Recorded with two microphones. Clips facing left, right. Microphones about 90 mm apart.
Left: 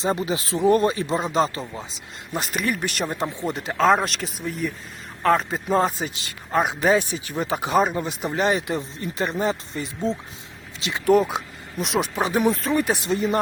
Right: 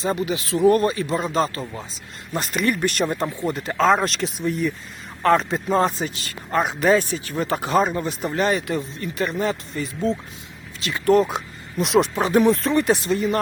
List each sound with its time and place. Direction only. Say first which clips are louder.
0.0 s speech: even; 25° left (ahead or behind)
0.6 s speech: right 2 dB; 20° left (ahead or behind)
2.3 s speech: right 3 dB; 5° left (ahead or behind)
3.2 s speech: right 2 dB; 20° left (ahead or behind)
3.8 s speech: even; 5° left (ahead or behind)
13.0 s speech: right 1 dB; 25° left (ahead or behind)